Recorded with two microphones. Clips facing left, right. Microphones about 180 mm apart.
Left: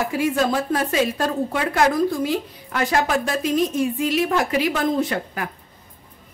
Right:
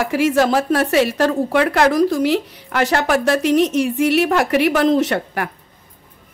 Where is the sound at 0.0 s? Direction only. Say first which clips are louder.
Right 5 dB; 90° right; by 5.5 s 70° right (ahead or behind).